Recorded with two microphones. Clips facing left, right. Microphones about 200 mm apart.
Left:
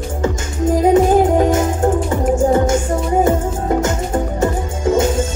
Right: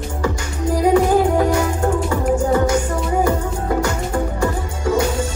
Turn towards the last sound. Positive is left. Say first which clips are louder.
# left 3 dB
turn(degrees=25)  # may be behind; listen again after turning